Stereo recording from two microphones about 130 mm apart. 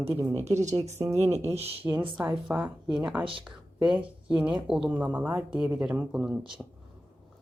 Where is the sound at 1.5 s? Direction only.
50° right (ahead or behind).